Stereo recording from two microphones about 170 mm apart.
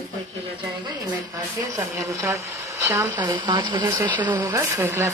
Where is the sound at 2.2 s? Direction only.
15° right (ahead or behind).